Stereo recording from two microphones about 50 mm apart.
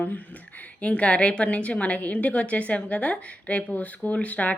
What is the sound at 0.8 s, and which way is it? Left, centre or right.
A woman's voice, left.